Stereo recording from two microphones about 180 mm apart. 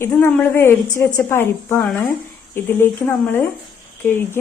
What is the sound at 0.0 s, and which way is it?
Speech, 10° left (ahead or behind).